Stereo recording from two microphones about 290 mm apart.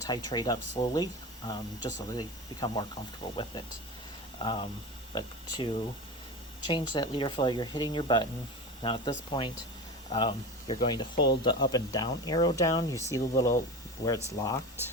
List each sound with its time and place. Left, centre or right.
0.1 s speech: centre
4.4 s speech: centre